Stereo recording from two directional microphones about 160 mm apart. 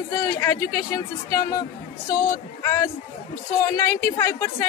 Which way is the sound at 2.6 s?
20° left (ahead or behind).